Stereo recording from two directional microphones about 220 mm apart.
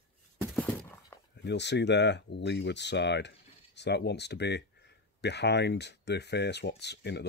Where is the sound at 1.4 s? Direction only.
50° left (ahead or behind).